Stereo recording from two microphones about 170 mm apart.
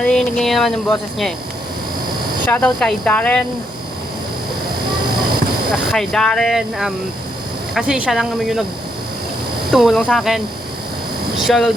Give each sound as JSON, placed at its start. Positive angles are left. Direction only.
{"t": 0.0, "sound": "speech", "side_deg": 5}
{"t": 2.5, "sound": "speech", "side_deg": 10}
{"t": 5.7, "sound": "speech", "side_deg": 0}
{"t": 9.7, "sound": "speech", "side_deg": 0}
{"t": 11.4, "sound": "speech", "side_deg": 0}